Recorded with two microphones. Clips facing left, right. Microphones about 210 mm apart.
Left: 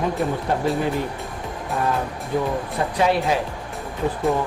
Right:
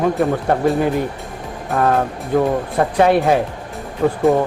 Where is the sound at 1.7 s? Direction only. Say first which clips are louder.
Right 7 dB; 60° right (ahead or behind).